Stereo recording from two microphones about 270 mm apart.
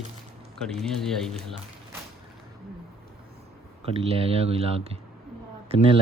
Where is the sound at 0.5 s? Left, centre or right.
Centre.